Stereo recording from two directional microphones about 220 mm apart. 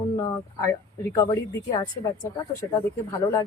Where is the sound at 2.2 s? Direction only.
15° left (ahead or behind).